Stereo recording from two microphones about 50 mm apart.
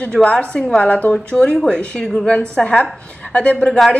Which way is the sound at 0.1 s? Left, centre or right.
Left.